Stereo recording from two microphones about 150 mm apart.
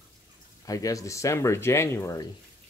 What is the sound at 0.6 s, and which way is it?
Speech, 25° left (ahead or behind).